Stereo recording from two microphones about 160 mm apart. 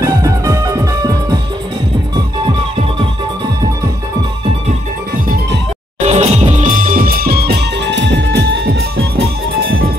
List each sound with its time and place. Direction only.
0.0 s music: 20° right (ahead or behind)
5.9 s music: 45° right (ahead or behind); by 8.8 s 90° right